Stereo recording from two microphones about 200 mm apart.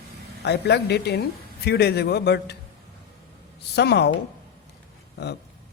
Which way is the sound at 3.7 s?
55° left (ahead or behind).